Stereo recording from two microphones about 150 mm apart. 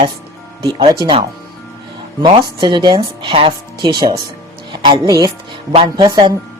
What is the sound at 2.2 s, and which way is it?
A woman's voice, 30° right (ahead or behind).